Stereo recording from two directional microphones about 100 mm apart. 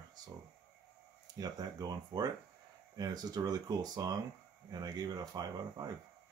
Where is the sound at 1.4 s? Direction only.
40° right (ahead or behind).